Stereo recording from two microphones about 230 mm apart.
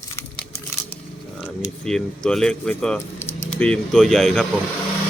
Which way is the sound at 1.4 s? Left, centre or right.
Centre.